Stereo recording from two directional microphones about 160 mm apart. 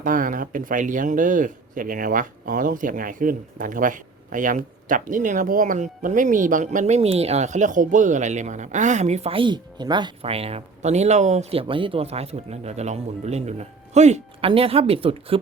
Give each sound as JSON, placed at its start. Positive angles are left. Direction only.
{"t": 0.0, "sound": "speech", "side_deg": -55}
{"t": 11.7, "sound": "speech", "side_deg": -35}